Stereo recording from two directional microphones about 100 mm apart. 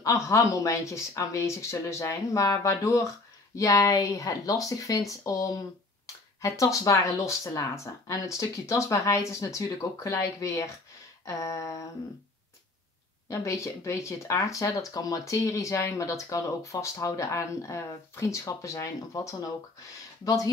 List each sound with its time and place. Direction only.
0.0 s speech: 30° left (ahead or behind)
6.6 s speech: 35° left (ahead or behind)
13.3 s speech: 30° left (ahead or behind)